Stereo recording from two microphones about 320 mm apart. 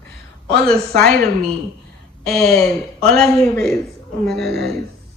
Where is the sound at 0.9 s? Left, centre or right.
Right.